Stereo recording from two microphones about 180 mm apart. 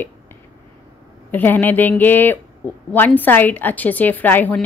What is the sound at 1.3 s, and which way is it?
A woman's voice, 10° left (ahead or behind).